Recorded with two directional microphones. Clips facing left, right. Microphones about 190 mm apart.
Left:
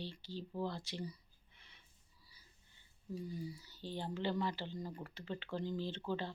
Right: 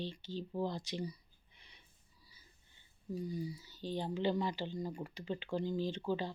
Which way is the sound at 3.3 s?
15° right (ahead or behind).